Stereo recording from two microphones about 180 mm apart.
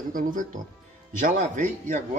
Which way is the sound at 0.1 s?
50° right (ahead or behind).